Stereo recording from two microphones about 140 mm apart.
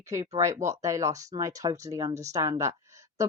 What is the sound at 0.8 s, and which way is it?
Speech, 20° right (ahead or behind).